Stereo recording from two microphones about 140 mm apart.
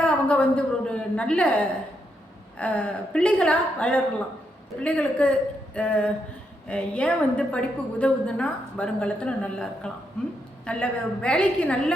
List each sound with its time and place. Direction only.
0.0 s a woman's voice: 10° left (ahead or behind)